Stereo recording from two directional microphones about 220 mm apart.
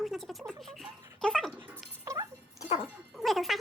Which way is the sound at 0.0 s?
Centre (ahead or behind).